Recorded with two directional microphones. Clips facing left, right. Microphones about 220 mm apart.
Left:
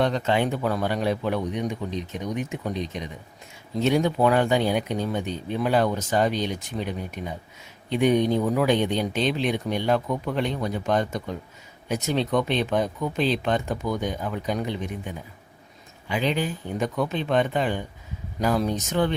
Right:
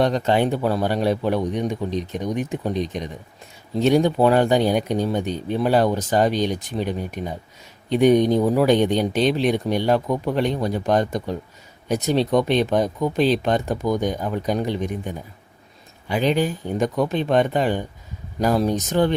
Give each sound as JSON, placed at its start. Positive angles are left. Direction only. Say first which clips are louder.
{"t": 0.0, "sound": "speech", "louder": "right 4 dB", "side_deg": -35}
{"t": 3.8, "sound": "speech", "louder": "right 4 dB", "side_deg": -30}
{"t": 7.9, "sound": "speech", "louder": "right 5 dB", "side_deg": -40}